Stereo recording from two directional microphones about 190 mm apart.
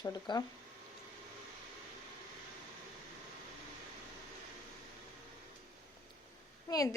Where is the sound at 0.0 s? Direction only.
20° left (ahead or behind).